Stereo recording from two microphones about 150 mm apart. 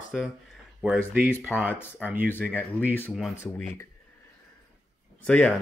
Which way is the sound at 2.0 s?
10° right (ahead or behind).